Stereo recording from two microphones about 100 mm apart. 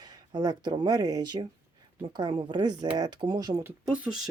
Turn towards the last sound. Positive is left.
turn(degrees=-10)  # may be behind; listen again after turning